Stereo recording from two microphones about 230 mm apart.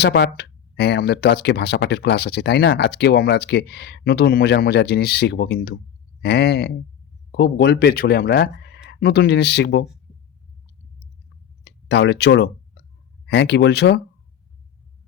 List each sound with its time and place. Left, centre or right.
0.0 s speech: left
11.6 s speech: left